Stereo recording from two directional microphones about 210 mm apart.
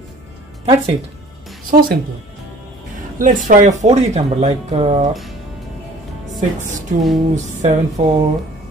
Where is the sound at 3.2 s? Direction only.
40° right (ahead or behind).